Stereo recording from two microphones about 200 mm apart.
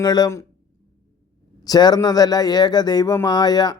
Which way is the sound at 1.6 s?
20° left (ahead or behind).